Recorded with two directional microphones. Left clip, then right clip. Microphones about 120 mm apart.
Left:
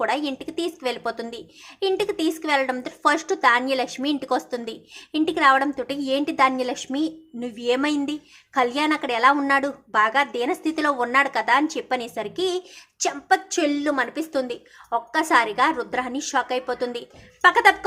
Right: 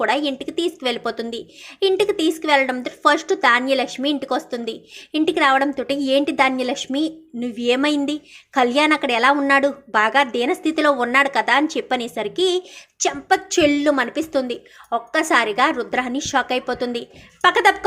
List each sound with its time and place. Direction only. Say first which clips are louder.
0.0 s a woman's voice: right 4 dB; 15° right (ahead or behind)